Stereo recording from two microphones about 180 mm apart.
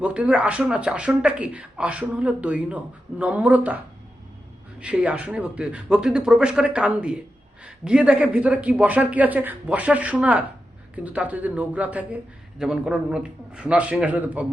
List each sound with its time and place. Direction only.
0.0 s speech: 5° right (ahead or behind)
4.8 s speech: 5° right (ahead or behind)